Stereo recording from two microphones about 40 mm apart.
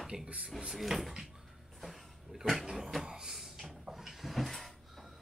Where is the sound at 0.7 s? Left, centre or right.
Centre.